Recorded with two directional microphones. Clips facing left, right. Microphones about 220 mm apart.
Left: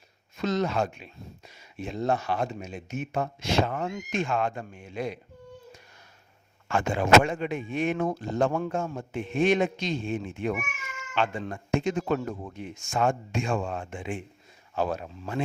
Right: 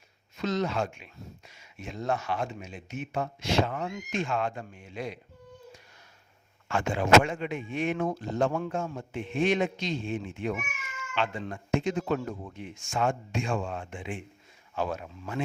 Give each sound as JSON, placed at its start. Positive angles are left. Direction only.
{"t": 0.3, "sound": "speech", "side_deg": 50}
{"t": 6.7, "sound": "speech", "side_deg": 50}